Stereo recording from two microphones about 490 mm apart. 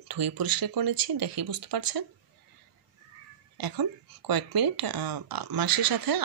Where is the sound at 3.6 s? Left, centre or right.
Right.